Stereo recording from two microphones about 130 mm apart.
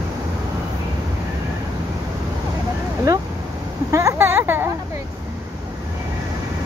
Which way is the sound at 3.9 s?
25° right (ahead or behind).